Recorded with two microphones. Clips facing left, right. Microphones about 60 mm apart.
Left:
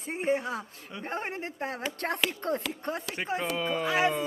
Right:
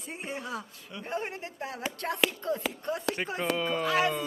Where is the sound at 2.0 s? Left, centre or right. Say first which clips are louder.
Right 2 dB; left.